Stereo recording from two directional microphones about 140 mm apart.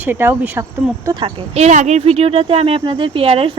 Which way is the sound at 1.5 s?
55° right (ahead or behind).